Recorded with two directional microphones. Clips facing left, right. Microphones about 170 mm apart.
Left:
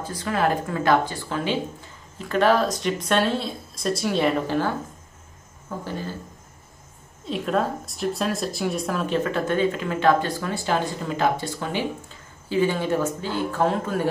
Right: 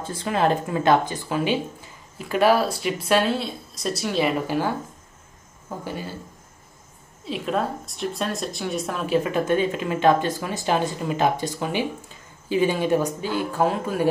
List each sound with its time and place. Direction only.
0.1 s speech: 25° right (ahead or behind)
5.9 s speech: 10° right (ahead or behind)
7.2 s speech: centre (ahead or behind)